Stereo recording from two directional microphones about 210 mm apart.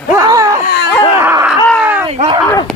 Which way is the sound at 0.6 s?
55° left (ahead or behind).